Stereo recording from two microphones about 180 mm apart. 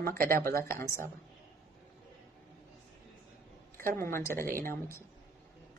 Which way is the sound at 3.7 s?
50° right (ahead or behind).